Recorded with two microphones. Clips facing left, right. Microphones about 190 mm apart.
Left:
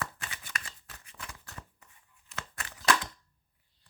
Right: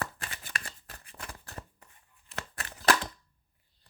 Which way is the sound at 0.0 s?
35° right (ahead or behind).